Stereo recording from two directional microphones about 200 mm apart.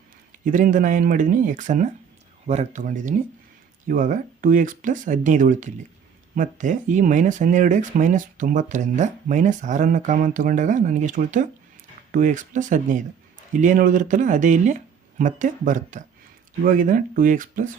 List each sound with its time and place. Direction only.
0.4 s speech: 40° right (ahead or behind)